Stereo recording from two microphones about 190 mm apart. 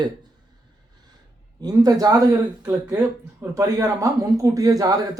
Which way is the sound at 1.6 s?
20° right (ahead or behind).